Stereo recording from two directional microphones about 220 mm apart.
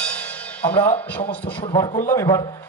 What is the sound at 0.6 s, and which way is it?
A man's voice, 5° left (ahead or behind).